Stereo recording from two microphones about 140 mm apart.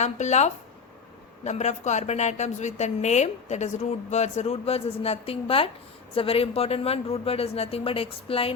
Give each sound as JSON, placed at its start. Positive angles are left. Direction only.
{"t": 0.0, "sound": "speech", "side_deg": 55}